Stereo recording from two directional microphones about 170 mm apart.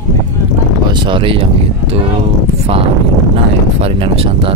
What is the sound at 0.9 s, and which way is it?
Speech, 30° right (ahead or behind).